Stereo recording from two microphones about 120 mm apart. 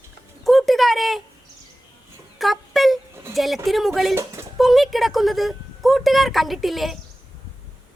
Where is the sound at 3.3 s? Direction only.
Centre (ahead or behind).